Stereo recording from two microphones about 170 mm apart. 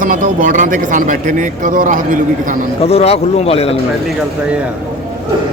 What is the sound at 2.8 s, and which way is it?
Speech, 35° left (ahead or behind).